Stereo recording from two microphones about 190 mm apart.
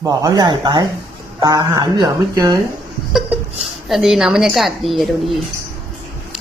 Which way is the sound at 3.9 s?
Centre (ahead or behind).